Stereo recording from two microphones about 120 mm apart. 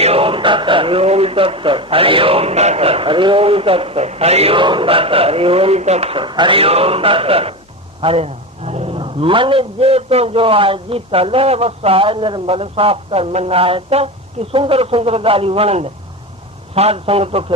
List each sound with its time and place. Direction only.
0.0 s a man's voice: 55° right (ahead or behind)